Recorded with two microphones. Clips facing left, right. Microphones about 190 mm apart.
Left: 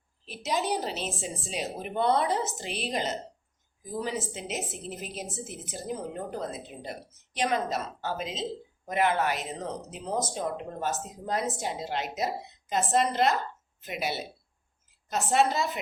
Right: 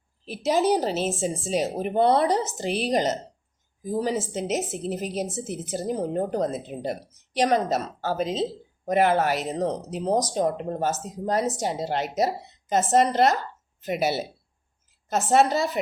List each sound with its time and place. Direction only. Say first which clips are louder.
0.4 s a woman's voice: right 8 dB; 45° right (ahead or behind)